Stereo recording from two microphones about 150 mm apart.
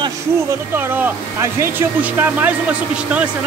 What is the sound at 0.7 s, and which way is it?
Speech, 10° right (ahead or behind).